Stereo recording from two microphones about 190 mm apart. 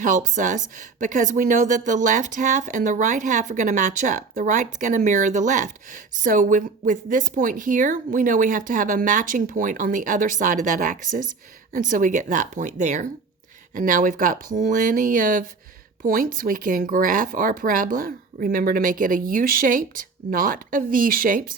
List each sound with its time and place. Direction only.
0.0 s a woman's voice: 40° right (ahead or behind)